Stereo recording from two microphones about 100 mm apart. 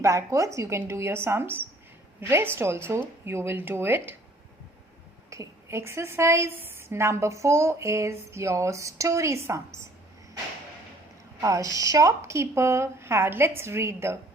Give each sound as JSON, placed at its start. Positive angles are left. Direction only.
{"t": 0.0, "sound": "a woman's voice", "side_deg": -30}
{"t": 5.3, "sound": "a woman's voice", "side_deg": -30}
{"t": 11.3, "sound": "a woman's voice", "side_deg": -35}